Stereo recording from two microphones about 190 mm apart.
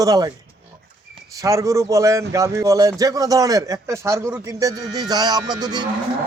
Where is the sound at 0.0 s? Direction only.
20° right (ahead or behind).